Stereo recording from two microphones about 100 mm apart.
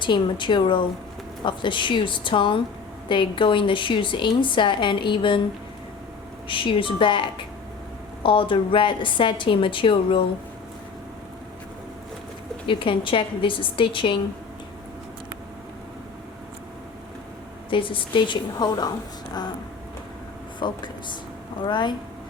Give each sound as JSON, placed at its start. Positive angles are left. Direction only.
{"t": 0.0, "sound": "a woman's voice", "side_deg": 50}
{"t": 6.5, "sound": "a woman's voice", "side_deg": 60}
{"t": 12.6, "sound": "a woman's voice", "side_deg": 60}
{"t": 17.7, "sound": "a woman's voice", "side_deg": 60}
{"t": 20.6, "sound": "a woman's voice", "side_deg": 50}